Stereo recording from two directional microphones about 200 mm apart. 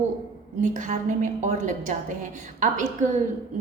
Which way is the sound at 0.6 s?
40° right (ahead or behind).